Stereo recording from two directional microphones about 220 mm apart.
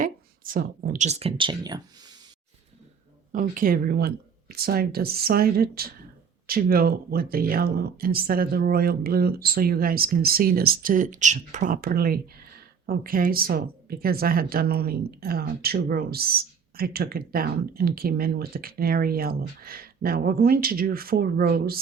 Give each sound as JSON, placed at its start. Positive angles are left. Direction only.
{"t": 0.0, "sound": "speech", "side_deg": -40}
{"t": 3.4, "sound": "speech", "side_deg": -40}